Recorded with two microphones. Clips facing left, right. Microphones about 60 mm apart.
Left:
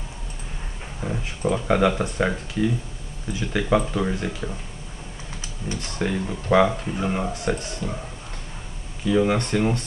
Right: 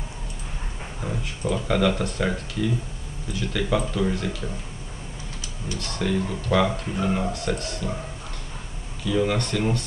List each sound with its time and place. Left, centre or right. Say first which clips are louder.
1.0 s speech: left 3 dB; centre
5.7 s speech: even; left
7.1 s speech: right 1 dB; centre
7.4 s speech: left 1 dB; centre
9.0 s speech: left 3 dB; centre